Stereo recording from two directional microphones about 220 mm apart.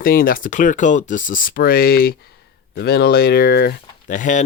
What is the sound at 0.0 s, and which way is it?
Speech, 40° left (ahead or behind).